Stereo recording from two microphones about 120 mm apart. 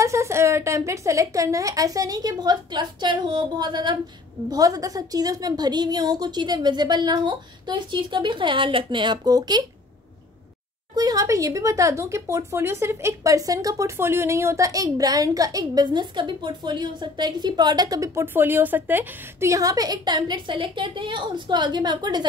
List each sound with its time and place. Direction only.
0.0 s a woman's voice: 25° right (ahead or behind)
11.0 s speech: 30° right (ahead or behind)